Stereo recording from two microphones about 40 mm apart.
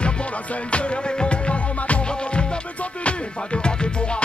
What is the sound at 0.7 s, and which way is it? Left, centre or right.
Music, left.